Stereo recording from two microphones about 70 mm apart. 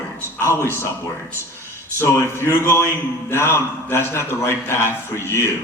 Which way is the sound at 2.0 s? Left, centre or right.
Left.